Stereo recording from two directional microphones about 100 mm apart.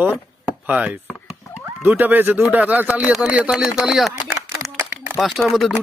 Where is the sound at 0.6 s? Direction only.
10° right (ahead or behind).